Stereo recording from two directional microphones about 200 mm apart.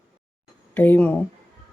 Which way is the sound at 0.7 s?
10° left (ahead or behind).